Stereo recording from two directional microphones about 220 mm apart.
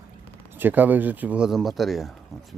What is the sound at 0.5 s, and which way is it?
Speech, 10° right (ahead or behind).